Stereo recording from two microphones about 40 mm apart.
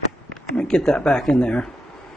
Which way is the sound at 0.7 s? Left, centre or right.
Centre.